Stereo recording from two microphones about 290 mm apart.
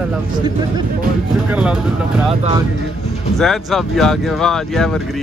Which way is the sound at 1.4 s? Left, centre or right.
Centre.